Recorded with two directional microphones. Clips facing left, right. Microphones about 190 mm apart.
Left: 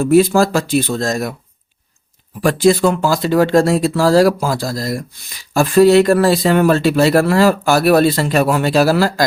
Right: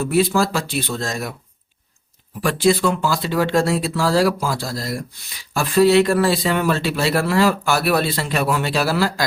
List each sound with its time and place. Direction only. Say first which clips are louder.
0.0 s speech: left 7 dB; 45° left (ahead or behind)
2.4 s speech: left 5 dB; 45° left (ahead or behind)